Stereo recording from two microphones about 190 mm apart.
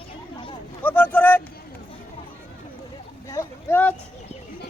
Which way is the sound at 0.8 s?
10° left (ahead or behind).